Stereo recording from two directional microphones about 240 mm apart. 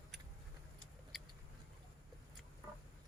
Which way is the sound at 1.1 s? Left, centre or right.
Centre.